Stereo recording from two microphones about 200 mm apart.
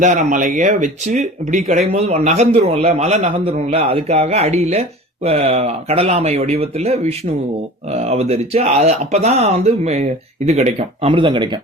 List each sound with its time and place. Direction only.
0.0 s speech: 40° right (ahead or behind)